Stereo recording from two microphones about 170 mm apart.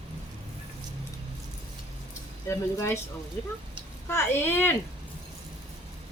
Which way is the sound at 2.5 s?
15° left (ahead or behind).